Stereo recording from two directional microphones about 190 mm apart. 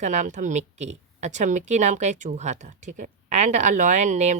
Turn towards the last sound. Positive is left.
turn(degrees=-40)  # may be behind; listen again after turning